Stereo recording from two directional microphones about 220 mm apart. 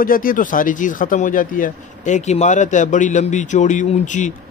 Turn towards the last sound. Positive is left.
turn(degrees=35)  # may be behind; listen again after turning